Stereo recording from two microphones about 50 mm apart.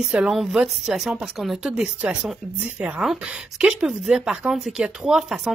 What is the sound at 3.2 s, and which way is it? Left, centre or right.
Speech, right.